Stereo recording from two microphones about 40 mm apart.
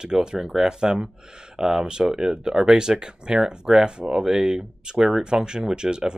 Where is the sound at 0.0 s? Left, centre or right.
Centre.